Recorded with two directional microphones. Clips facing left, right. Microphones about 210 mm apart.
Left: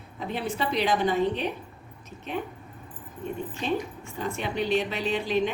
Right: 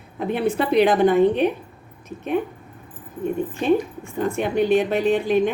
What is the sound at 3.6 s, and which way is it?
A woman's voice, 50° right (ahead or behind).